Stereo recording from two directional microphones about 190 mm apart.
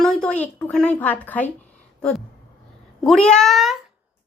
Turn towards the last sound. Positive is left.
turn(degrees=0)  # may be behind; listen again after turning